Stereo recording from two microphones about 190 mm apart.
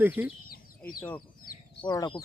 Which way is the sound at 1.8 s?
25° left (ahead or behind).